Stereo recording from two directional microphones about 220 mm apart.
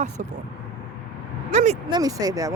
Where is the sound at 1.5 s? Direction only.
30° right (ahead or behind).